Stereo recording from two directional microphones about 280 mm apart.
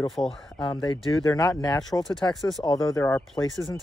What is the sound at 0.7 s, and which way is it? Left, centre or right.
Speech, centre.